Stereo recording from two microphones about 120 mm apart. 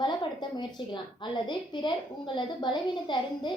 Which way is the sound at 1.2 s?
40° left (ahead or behind).